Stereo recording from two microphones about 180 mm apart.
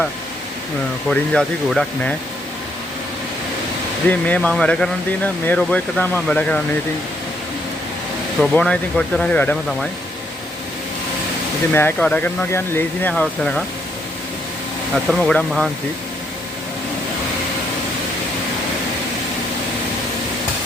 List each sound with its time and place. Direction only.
1.1 s speech: 5° left (ahead or behind)
4.1 s speech: 10° left (ahead or behind)
8.4 s speech: 5° left (ahead or behind)
11.7 s speech: 10° left (ahead or behind)
14.9 s speech: centre (ahead or behind)